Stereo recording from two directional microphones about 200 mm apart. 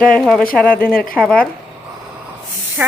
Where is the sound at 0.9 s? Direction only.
45° left (ahead or behind).